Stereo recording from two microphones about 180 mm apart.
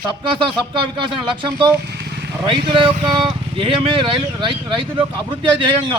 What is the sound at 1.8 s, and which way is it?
Vehicle, 65° right (ahead or behind).